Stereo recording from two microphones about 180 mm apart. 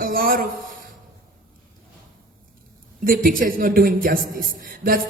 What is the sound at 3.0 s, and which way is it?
A man's voice, 50° right (ahead or behind).